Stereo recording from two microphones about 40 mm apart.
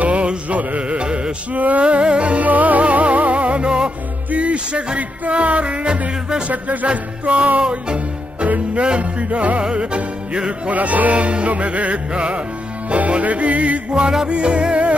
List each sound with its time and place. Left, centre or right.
0.0 s music: right
1.5 s music: right
1.8 s music: right
4.3 s speech: right
4.9 s music: right
6.5 s music: right
6.9 s music: right
8.5 s music: right
9.6 s music: right
10.7 s music: right
14.2 s music: right